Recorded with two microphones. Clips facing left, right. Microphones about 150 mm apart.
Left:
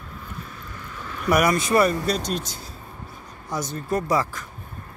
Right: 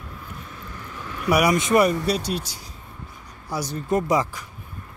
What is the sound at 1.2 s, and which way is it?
Speech, 10° right (ahead or behind).